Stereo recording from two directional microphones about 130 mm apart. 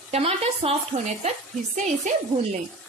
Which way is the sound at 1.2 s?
70° right (ahead or behind).